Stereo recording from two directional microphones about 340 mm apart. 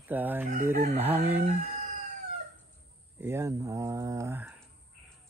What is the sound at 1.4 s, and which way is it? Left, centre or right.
Speech, right.